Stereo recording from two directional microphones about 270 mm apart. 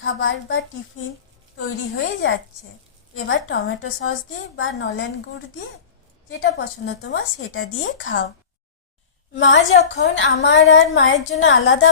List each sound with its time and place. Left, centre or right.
0.0 s a woman's voice: left
6.2 s a woman's voice: left
9.4 s a woman's voice: left